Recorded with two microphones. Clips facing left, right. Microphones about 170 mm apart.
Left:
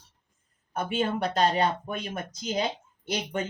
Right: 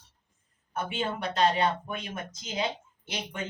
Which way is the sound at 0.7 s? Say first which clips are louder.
Left 4 dB; 40° left (ahead or behind).